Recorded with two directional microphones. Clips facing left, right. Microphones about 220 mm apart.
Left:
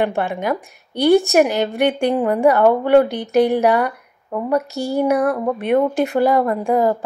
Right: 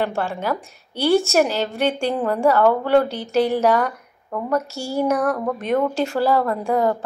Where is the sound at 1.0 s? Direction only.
15° left (ahead or behind).